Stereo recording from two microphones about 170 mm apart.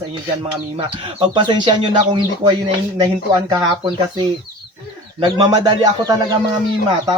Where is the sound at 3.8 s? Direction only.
25° right (ahead or behind).